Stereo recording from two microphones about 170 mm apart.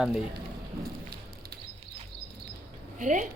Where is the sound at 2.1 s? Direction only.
30° right (ahead or behind).